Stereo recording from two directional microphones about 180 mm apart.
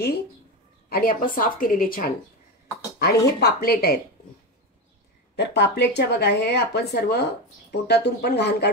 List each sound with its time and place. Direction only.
0.8 s a woman's voice: 55° left (ahead or behind)
5.3 s speech: 70° left (ahead or behind)